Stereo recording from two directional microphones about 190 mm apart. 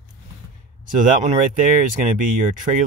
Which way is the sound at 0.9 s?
40° right (ahead or behind).